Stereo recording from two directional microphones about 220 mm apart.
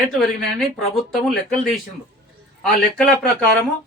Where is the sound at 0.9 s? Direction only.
Centre (ahead or behind).